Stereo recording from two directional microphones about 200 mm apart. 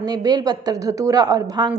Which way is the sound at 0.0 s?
20° right (ahead or behind).